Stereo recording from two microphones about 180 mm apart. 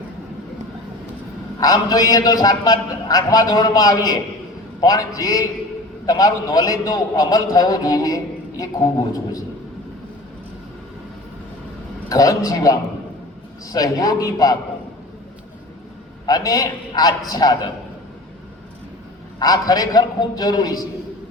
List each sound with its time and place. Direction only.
1.6 s a man's voice: 20° left (ahead or behind)
12.0 s a man's voice: 20° left (ahead or behind)
16.2 s a man's voice: 20° left (ahead or behind)
19.4 s a man's voice: 20° left (ahead or behind)